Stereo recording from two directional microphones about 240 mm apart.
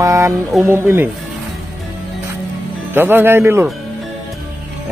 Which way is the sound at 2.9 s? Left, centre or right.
Centre.